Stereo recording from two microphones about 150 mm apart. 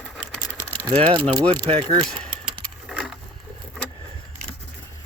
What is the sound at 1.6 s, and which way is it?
Speech, 25° right (ahead or behind).